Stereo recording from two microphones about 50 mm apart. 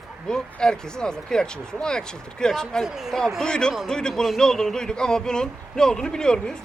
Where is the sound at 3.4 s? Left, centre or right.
Centre.